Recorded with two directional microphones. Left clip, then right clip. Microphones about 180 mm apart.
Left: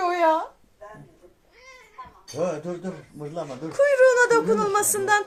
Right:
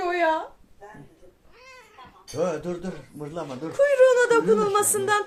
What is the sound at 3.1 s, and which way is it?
Speech, 45° right (ahead or behind).